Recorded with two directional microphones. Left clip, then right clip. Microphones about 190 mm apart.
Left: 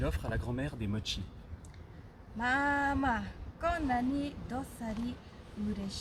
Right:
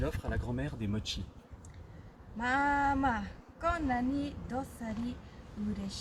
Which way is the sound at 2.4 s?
10° left (ahead or behind).